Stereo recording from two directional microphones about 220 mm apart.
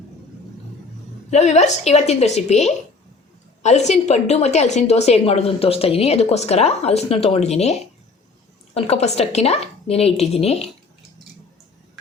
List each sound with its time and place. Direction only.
1.3 s a woman's voice: 30° left (ahead or behind)